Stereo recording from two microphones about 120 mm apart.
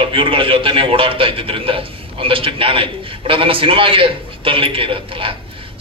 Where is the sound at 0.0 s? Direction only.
45° right (ahead or behind).